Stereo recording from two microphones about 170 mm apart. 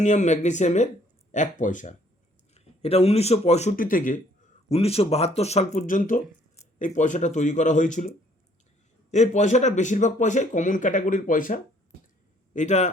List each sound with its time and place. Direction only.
0.0 s speech: 45° left (ahead or behind)
2.6 s speech: 35° left (ahead or behind)
3.8 s speech: 55° left (ahead or behind)
4.7 s speech: 35° left (ahead or behind)
9.1 s speech: 45° left (ahead or behind)